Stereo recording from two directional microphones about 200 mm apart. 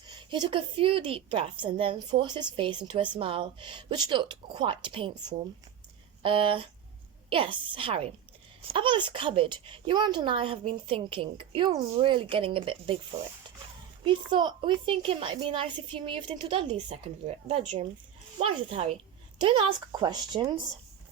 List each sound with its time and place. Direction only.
0.1 s a woman's voice: 20° right (ahead or behind)
14.0 s a woman's voice: 25° right (ahead or behind)